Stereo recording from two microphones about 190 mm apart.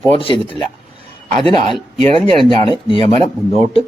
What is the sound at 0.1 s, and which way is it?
Speech, 30° left (ahead or behind).